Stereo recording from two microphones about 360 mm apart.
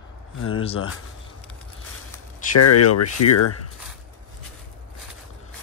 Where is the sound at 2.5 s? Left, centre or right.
Left.